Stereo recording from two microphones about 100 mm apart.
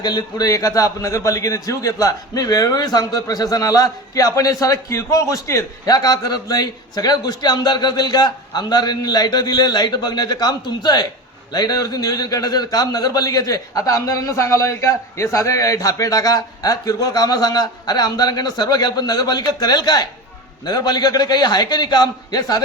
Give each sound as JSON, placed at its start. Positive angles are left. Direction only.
{"t": 0.0, "sound": "a man's voice", "side_deg": 45}